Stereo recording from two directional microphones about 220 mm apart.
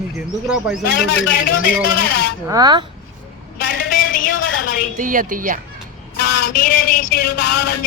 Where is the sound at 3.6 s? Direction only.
40° left (ahead or behind).